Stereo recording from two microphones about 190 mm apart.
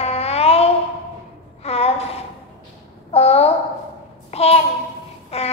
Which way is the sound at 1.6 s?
35° left (ahead or behind).